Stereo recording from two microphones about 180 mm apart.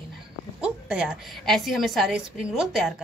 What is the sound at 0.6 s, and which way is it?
A woman's voice, 5° right (ahead or behind).